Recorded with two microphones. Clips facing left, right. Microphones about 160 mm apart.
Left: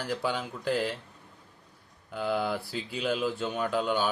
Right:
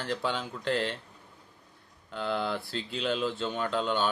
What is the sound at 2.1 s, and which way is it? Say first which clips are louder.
Speech: left 2 dB; 10° left (ahead or behind).